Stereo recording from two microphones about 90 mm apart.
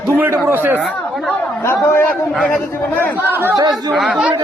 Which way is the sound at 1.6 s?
30° left (ahead or behind).